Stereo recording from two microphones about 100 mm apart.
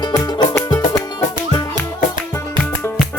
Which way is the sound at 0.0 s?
40° left (ahead or behind).